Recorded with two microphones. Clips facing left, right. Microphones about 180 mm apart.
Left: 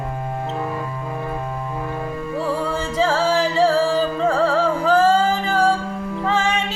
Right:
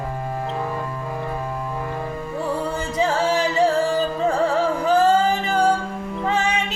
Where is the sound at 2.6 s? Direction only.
20° right (ahead or behind).